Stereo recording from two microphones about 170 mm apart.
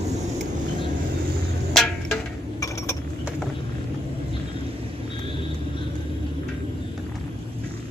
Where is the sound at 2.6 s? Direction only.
20° left (ahead or behind).